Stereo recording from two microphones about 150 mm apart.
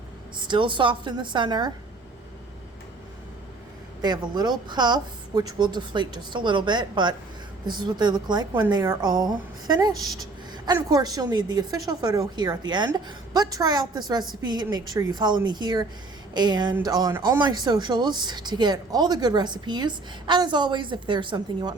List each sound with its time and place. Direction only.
0.4 s a woman's voice: 30° right (ahead or behind)
4.0 s speech: 30° right (ahead or behind)